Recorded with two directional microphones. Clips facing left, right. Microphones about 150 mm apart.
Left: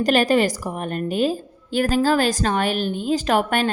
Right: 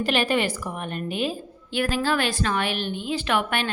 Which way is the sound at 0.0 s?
40° left (ahead or behind).